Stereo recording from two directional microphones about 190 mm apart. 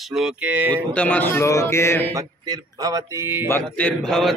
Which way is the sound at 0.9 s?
10° left (ahead or behind).